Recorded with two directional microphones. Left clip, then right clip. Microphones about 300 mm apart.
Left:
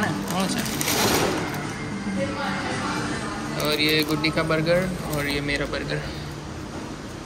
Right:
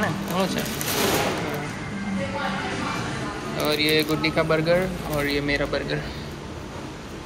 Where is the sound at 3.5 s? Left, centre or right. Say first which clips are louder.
Right 1 dB; centre.